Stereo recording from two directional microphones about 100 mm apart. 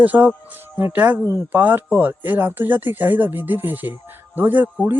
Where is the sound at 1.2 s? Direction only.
30° right (ahead or behind).